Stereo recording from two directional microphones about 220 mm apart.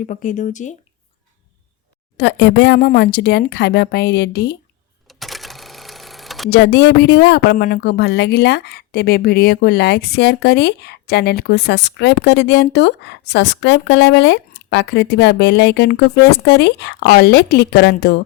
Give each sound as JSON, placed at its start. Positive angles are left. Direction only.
{"t": 0.1, "sound": "speech", "side_deg": 35}
{"t": 2.1, "sound": "speech", "side_deg": 50}
{"t": 5.0, "sound": "sewing machine", "side_deg": 0}
{"t": 6.5, "sound": "speech", "side_deg": 50}